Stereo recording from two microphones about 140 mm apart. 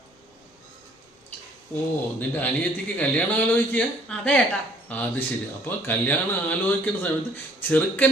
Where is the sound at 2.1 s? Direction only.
15° left (ahead or behind).